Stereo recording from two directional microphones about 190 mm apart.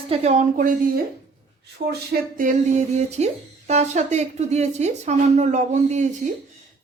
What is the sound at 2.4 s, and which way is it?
Speech, 40° right (ahead or behind).